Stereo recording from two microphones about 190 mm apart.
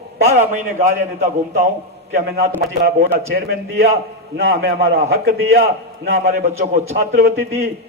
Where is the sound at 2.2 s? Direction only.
55° right (ahead or behind).